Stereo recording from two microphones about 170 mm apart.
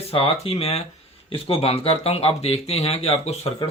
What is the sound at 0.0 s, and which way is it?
Speech, 35° left (ahead or behind).